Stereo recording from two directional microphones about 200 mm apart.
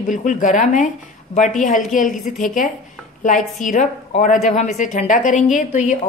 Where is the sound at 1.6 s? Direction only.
35° left (ahead or behind).